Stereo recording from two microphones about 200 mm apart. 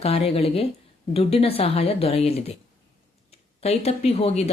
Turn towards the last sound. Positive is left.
turn(degrees=30)  # may be behind; listen again after turning